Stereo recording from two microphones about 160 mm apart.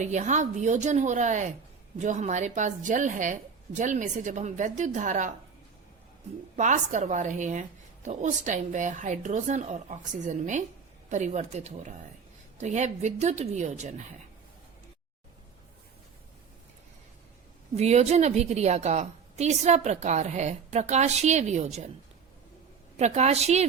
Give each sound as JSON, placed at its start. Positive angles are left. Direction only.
{"t": 0.0, "sound": "a woman's voice", "side_deg": -45}
{"t": 6.6, "sound": "a woman's voice", "side_deg": -50}
{"t": 17.7, "sound": "a woman's voice", "side_deg": -40}
{"t": 23.0, "sound": "a woman's voice", "side_deg": -45}